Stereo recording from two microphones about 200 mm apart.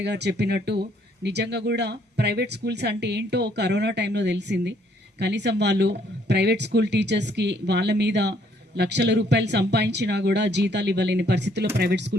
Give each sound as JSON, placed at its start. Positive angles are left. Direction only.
{"t": 0.0, "sound": "speech", "side_deg": -55}